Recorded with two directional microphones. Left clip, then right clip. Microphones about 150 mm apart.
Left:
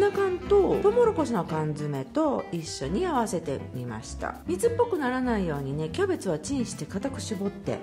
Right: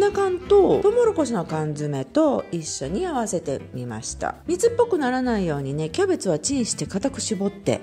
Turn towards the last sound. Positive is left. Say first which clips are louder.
# right 7 dB
turn(degrees=-40)  # may be behind; listen again after turning